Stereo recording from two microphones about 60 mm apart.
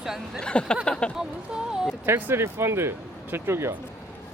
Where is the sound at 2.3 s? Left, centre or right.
Right.